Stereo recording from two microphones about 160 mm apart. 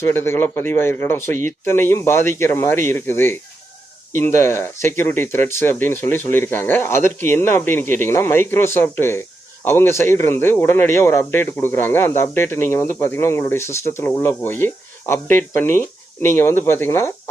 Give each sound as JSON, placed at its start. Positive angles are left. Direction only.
{"t": 0.0, "sound": "speech", "side_deg": 15}
{"t": 1.3, "sound": "speech", "side_deg": -50}
{"t": 1.6, "sound": "speech", "side_deg": 15}